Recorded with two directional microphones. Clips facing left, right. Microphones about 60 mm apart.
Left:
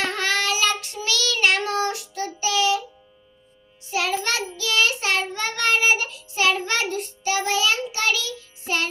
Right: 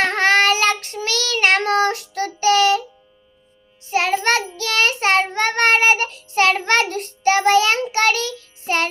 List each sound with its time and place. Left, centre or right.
0.0 s child singing: right
3.8 s child singing: right